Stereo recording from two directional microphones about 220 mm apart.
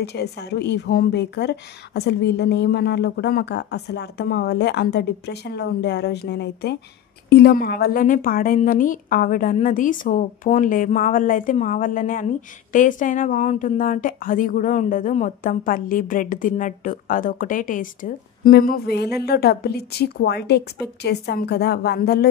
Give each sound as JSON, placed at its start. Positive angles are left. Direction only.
{"t": 0.0, "sound": "a woman's voice", "side_deg": 50}